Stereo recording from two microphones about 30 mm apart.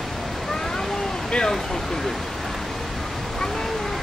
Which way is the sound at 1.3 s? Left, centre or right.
Left.